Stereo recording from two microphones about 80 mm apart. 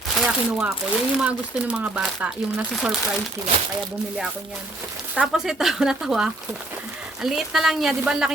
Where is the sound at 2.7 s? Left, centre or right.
Centre.